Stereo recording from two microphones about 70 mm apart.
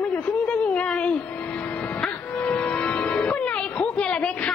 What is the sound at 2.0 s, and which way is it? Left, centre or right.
Music, centre.